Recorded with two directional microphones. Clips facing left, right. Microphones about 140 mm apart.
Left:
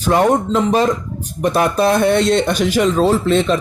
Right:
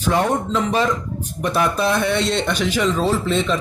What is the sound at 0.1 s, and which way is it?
A man's voice, 40° left (ahead or behind).